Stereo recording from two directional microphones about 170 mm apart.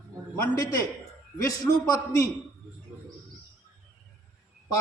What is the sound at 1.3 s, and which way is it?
Speech, 20° left (ahead or behind).